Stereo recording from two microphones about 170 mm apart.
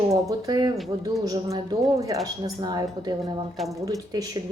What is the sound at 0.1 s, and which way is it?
A woman's voice, 20° right (ahead or behind).